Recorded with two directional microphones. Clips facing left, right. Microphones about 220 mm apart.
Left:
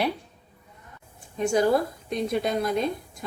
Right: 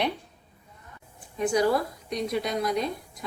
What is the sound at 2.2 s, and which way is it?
Speech, 25° left (ahead or behind).